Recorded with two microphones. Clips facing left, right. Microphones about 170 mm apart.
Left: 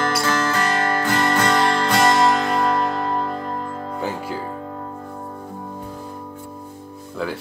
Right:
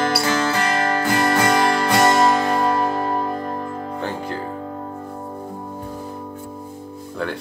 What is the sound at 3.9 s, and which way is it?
Music, 5° left (ahead or behind).